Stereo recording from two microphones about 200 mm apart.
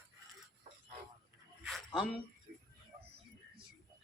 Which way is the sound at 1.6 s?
Centre (ahead or behind).